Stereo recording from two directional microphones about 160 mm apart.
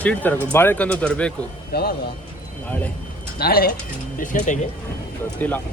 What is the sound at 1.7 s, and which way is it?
Speech, 75° left (ahead or behind).